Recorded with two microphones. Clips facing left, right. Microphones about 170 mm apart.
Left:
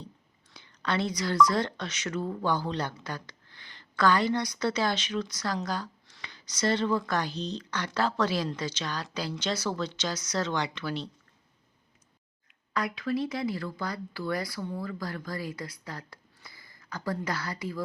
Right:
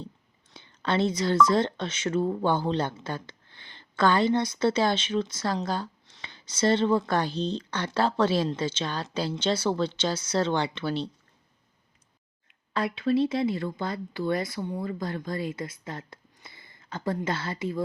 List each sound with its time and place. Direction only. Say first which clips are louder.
0.5 s speech: right 3 dB; 25° right (ahead or behind)
12.7 s speech: right 5 dB; 25° right (ahead or behind)